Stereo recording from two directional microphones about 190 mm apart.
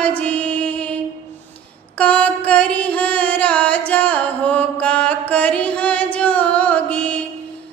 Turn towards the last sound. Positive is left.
turn(degrees=5)  # may be behind; listen again after turning